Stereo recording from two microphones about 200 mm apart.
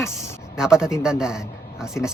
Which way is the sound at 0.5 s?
5° right (ahead or behind).